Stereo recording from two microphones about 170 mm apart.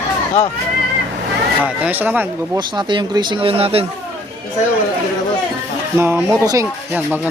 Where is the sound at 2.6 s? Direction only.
25° right (ahead or behind).